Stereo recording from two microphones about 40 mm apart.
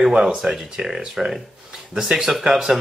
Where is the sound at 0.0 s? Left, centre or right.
Centre.